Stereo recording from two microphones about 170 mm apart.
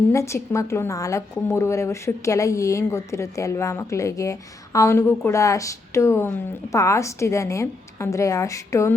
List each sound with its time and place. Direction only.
0.1 s a woman's voice: 15° left (ahead or behind)